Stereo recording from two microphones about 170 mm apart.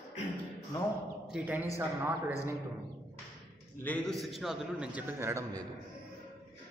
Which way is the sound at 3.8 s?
10° left (ahead or behind).